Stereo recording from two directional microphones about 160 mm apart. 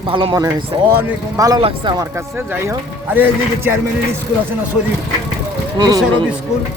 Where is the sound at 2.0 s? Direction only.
15° right (ahead or behind).